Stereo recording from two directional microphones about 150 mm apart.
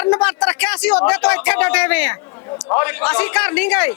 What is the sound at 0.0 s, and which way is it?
A man's voice, 5° left (ahead or behind).